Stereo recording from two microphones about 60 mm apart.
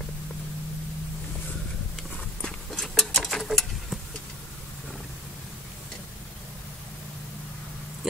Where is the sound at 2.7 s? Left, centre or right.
Centre.